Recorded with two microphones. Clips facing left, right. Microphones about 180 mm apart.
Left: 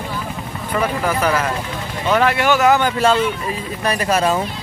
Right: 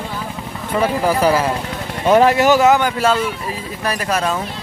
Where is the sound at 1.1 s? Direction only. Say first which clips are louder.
Right 3 dB; 30° right (ahead or behind).